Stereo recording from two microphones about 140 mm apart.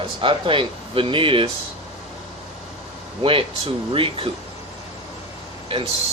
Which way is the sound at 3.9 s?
40° right (ahead or behind).